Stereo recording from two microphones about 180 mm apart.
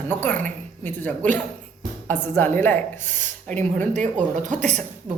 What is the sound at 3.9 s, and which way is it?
Speech, 45° right (ahead or behind).